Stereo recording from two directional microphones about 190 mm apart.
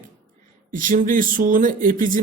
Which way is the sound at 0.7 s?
45° right (ahead or behind).